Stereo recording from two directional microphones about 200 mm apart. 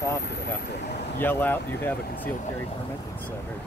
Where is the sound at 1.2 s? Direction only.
10° left (ahead or behind).